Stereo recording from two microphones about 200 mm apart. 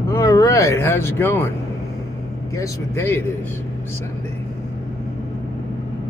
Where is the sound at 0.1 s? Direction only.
15° left (ahead or behind).